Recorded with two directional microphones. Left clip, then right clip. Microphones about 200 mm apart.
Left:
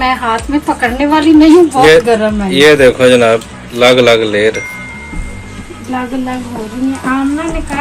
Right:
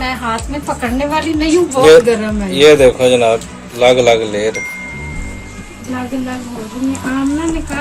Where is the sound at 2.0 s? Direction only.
30° left (ahead or behind).